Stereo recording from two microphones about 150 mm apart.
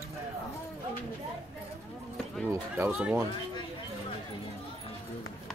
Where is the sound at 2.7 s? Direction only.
10° right (ahead or behind).